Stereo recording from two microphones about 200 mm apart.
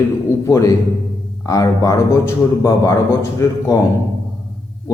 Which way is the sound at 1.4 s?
15° left (ahead or behind).